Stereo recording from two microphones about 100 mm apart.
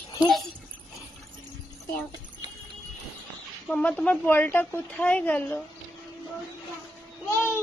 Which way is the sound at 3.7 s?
15° left (ahead or behind).